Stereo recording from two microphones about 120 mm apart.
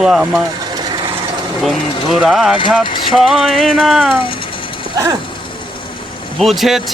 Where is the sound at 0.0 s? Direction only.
5° right (ahead or behind).